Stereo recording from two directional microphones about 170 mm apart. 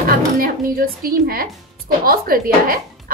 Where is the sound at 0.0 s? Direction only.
60° right (ahead or behind).